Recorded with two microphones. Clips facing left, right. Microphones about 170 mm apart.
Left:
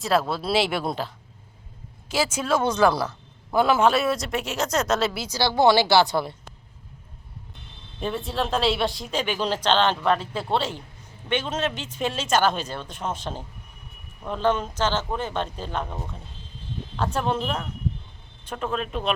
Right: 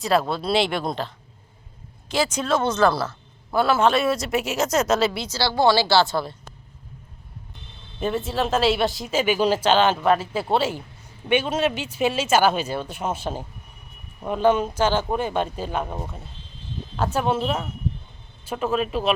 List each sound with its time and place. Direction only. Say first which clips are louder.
0.0 s a woman's voice: right 2 dB; centre (ahead or behind)
5.4 s speech: left 1 dB; 20° left (ahead or behind)
7.9 s a woman's voice: right 3 dB; centre (ahead or behind)